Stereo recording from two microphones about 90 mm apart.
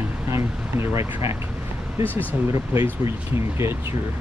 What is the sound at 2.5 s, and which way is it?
Speech, 35° right (ahead or behind).